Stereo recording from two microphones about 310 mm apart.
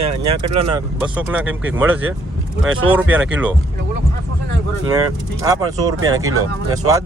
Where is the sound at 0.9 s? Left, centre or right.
Centre.